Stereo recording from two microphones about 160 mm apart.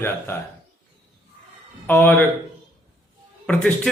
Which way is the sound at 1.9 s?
15° left (ahead or behind).